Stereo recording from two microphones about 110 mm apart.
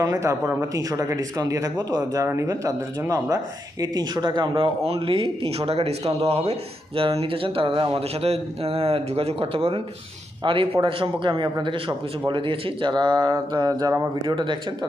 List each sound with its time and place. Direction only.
0.0 s a man's voice: 30° right (ahead or behind); by 12.9 s 55° right (ahead or behind)
13.0 s speech: 45° right (ahead or behind)
14.3 s a man's voice: 45° right (ahead or behind)